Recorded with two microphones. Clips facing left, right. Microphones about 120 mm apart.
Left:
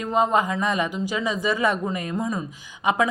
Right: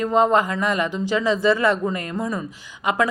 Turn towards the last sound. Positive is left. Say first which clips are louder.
# even
turn(degrees=20)  # may be behind; listen again after turning